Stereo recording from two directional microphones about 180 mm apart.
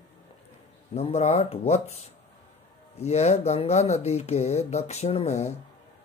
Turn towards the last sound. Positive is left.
turn(degrees=40)  # may be behind; listen again after turning